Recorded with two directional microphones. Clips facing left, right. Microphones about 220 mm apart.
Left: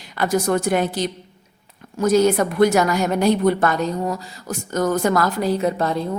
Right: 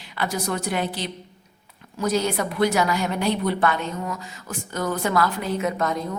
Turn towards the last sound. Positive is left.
turn(degrees=30)  # may be behind; listen again after turning